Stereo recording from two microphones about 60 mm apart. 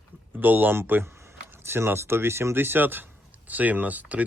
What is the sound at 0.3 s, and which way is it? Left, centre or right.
Speech, right.